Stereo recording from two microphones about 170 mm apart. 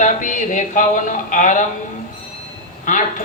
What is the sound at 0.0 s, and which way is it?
Speech, 50° left (ahead or behind).